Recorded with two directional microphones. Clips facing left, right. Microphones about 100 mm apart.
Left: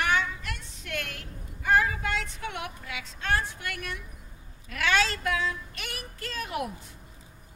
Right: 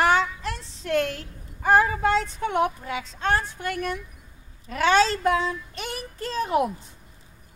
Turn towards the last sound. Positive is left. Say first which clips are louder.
# right 9 dB
turn(degrees=-30)  # may be behind; listen again after turning